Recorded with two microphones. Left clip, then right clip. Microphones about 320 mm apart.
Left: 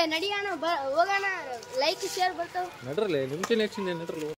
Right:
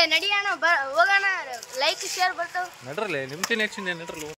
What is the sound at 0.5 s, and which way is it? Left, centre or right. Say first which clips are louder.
Speech: right 6 dB; centre.